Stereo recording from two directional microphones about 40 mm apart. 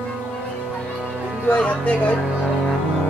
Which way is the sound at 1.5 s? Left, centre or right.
Left.